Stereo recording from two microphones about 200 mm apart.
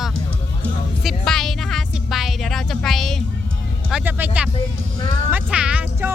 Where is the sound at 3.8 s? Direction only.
5° right (ahead or behind).